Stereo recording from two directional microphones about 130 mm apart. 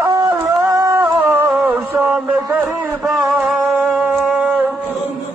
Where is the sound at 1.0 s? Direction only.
15° right (ahead or behind).